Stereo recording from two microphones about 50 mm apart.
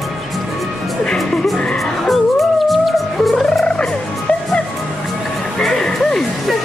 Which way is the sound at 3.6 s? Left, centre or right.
Centre.